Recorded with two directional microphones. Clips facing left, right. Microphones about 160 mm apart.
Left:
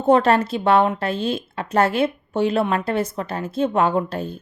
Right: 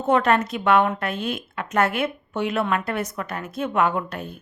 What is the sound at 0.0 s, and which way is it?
A woman's voice, 30° left (ahead or behind).